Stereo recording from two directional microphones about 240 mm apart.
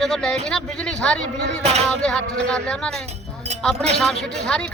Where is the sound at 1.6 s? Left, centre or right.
Right.